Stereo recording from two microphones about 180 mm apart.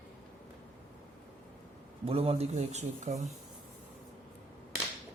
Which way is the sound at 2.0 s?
35° right (ahead or behind).